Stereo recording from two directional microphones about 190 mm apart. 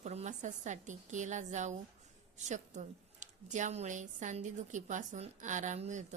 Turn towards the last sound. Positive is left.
turn(degrees=-40)  # may be behind; listen again after turning